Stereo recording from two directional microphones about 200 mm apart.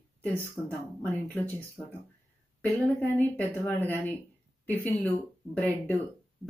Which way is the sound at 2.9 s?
10° left (ahead or behind).